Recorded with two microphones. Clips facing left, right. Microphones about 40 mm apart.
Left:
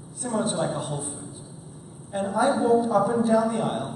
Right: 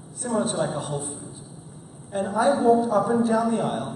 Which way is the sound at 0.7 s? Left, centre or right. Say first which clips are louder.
Even; centre.